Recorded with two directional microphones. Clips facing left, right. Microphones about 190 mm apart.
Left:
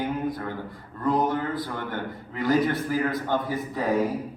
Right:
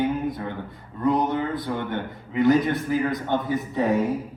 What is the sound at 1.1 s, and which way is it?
A man's voice, 20° right (ahead or behind).